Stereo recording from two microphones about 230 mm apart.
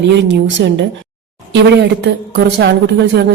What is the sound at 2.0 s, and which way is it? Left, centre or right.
A woman's voice, right.